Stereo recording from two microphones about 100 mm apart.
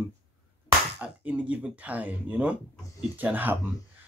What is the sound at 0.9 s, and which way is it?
A man's voice, 15° right (ahead or behind).